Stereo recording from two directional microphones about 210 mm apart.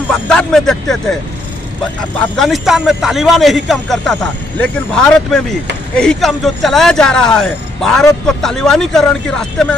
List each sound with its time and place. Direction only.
0.1 s a man's voice: 5° left (ahead or behind)
2.1 s a man's voice: centre (ahead or behind)